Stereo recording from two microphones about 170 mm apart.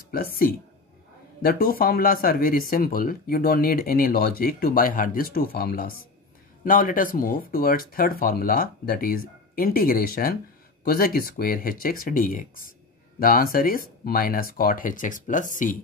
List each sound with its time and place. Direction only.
1.4 s speech: 60° left (ahead or behind)